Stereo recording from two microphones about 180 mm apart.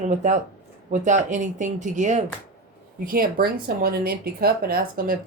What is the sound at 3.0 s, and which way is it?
Speech, 55° right (ahead or behind).